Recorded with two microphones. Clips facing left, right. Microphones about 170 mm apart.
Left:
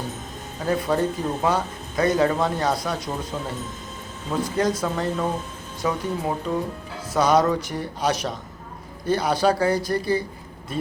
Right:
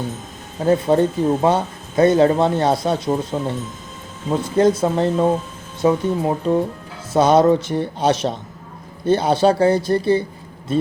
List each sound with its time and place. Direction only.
0.6 s speech: 30° right (ahead or behind)
4.3 s speech: 25° right (ahead or behind)